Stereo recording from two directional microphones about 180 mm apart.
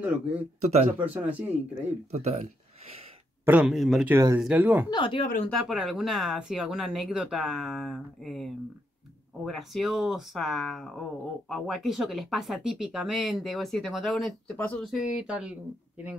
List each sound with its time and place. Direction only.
0.0 s speech: 10° right (ahead or behind)
0.6 s speech: 40° right (ahead or behind)
0.9 s speech: 10° right (ahead or behind)
2.0 s speech: 40° right (ahead or behind)
3.4 s speech: 5° right (ahead or behind)
4.1 s speech: 20° right (ahead or behind)
4.4 s speech: 5° right (ahead or behind)
4.8 s speech: 25° left (ahead or behind)
5.5 s speech: centre (ahead or behind)